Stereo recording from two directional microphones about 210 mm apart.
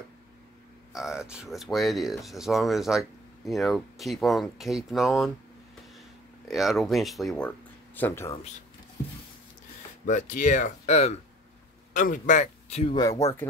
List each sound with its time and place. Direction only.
0.9 s speech: centre (ahead or behind)
6.4 s speech: centre (ahead or behind)
10.0 s speech: 35° left (ahead or behind); by 13.5 s 15° left (ahead or behind)